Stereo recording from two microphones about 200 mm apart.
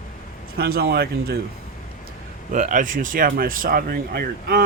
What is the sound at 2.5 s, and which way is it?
Speech, 40° right (ahead or behind).